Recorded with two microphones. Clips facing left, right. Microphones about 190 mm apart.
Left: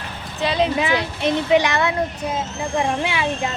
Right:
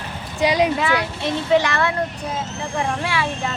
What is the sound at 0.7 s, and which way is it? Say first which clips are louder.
Speech: left 1 dB; 20° left (ahead or behind).